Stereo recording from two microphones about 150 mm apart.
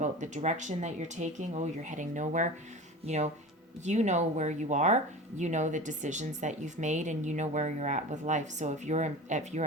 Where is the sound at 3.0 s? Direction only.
40° right (ahead or behind).